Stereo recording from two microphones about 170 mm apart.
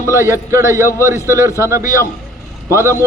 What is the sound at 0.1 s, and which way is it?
Speech, 15° right (ahead or behind).